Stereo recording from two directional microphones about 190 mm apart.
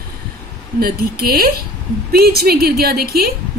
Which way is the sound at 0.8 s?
55° right (ahead or behind).